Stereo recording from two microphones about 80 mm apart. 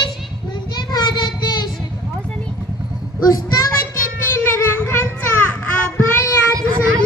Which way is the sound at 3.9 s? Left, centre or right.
Left.